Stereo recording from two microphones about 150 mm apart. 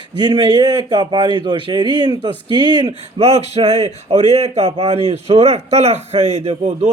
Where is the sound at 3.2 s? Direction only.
45° right (ahead or behind).